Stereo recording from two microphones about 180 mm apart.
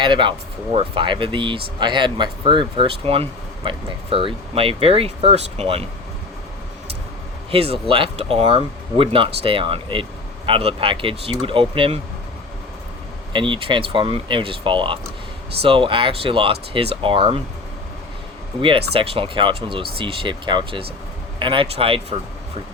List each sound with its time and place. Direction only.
0.0 s speech: 25° right (ahead or behind)
7.5 s speech: 35° right (ahead or behind)
13.3 s speech: 30° right (ahead or behind)
18.9 s speech: 30° right (ahead or behind)